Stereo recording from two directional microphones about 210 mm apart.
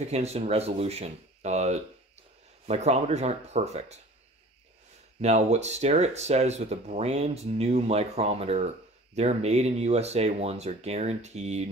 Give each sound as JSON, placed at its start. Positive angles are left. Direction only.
{"t": 0.0, "sound": "speech", "side_deg": -30}
{"t": 5.2, "sound": "speech", "side_deg": -30}